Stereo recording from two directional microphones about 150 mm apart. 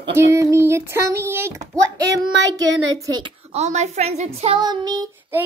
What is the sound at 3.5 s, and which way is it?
A woman's voice, 50° right (ahead or behind).